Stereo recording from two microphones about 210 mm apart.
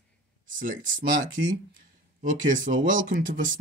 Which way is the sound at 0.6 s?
40° right (ahead or behind).